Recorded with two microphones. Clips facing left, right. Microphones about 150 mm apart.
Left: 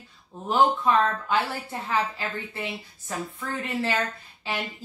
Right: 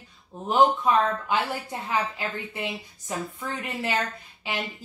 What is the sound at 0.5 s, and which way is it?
A woman's voice, 15° right (ahead or behind).